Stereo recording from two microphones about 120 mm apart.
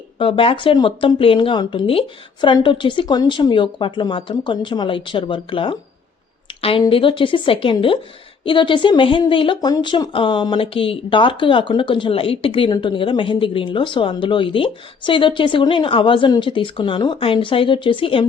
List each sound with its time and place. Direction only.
0.2 s speech: 50° left (ahead or behind)
9.6 s speech: 30° left (ahead or behind)